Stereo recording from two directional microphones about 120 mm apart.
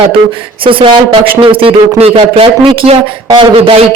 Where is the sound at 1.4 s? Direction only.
50° right (ahead or behind).